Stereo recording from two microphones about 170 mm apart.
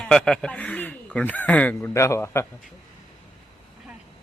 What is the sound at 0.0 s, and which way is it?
A man's voice, 5° left (ahead or behind).